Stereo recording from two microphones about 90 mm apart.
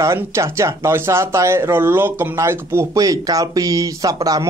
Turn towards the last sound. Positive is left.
turn(degrees=-40)  # may be behind; listen again after turning